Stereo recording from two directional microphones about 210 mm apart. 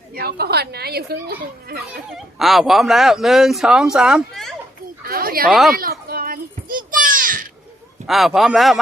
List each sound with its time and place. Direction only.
0.1 s speech: 45° right (ahead or behind)
2.0 s speech: centre (ahead or behind)
5.0 s a sound: 45° right (ahead or behind)
5.5 s speech: centre (ahead or behind)
5.7 s a sound: 45° right (ahead or behind)
8.0 s speech: centre (ahead or behind)